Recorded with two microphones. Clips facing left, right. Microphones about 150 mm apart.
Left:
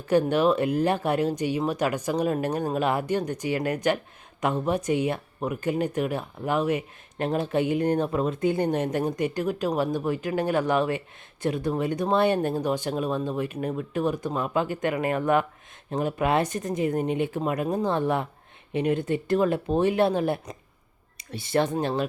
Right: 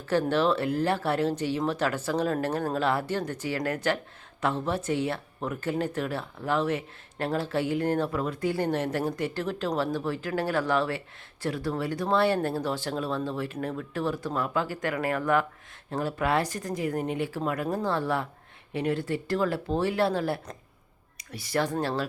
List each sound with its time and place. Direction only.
0.1 s speech: 15° left (ahead or behind)